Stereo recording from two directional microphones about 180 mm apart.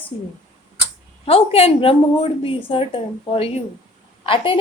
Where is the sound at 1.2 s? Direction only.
30° left (ahead or behind).